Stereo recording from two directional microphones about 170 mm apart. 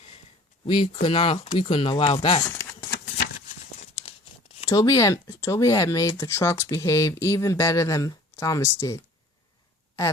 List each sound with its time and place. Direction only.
0.6 s speech: 30° left (ahead or behind)
2.5 s a sound: 15° left (ahead or behind)
3.8 s crumpling: 40° left (ahead or behind)
4.7 s speech: 20° left (ahead or behind)